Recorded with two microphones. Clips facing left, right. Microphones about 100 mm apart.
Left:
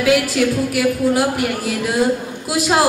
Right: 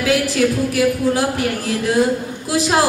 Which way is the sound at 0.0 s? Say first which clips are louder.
Left 1 dB; 20° left (ahead or behind).